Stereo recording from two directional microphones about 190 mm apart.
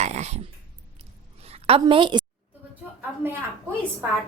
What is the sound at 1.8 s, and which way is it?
Speech, 25° right (ahead or behind).